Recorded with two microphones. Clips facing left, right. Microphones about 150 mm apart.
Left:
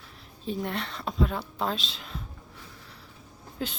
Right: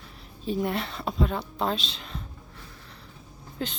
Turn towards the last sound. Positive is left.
turn(degrees=5)  # may be behind; listen again after turning